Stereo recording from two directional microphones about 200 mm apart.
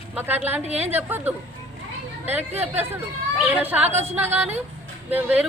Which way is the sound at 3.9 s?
35° right (ahead or behind).